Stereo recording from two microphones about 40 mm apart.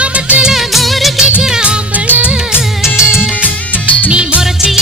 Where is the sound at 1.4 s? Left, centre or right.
Centre.